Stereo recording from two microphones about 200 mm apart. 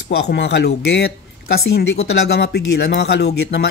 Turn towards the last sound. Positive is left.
turn(degrees=55)  # may be behind; listen again after turning